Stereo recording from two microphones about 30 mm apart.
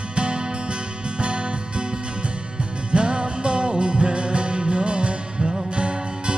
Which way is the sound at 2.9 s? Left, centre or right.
Right.